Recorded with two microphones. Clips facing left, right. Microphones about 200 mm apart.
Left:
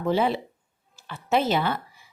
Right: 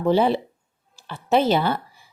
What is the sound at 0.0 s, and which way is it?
A woman's voice, 30° right (ahead or behind).